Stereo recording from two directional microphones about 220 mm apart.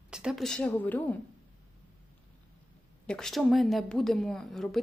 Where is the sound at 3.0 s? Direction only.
Centre (ahead or behind).